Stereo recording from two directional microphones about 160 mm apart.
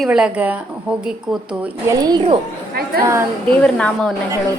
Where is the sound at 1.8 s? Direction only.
25° right (ahead or behind).